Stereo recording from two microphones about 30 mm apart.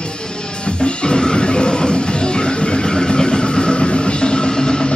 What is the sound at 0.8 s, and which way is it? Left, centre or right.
Music, left.